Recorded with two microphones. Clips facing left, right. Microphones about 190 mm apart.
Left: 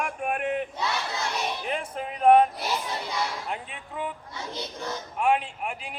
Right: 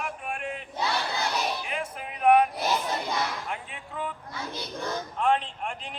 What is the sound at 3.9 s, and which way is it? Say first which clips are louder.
A man's voice: left 1 dB; 15° left (ahead or behind).